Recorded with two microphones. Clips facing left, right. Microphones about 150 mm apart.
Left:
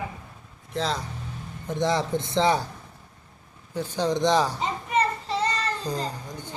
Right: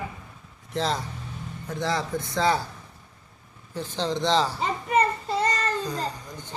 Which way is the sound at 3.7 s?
10° left (ahead or behind).